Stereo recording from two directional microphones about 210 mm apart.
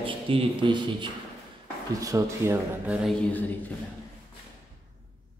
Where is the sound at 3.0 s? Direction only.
5° left (ahead or behind).